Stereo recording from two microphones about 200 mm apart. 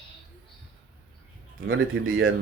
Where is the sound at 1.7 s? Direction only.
80° right.